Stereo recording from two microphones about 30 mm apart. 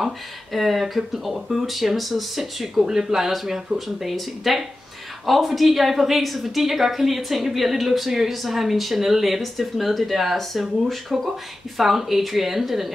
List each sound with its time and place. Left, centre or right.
0.0 s speech: centre
2.8 s speech: centre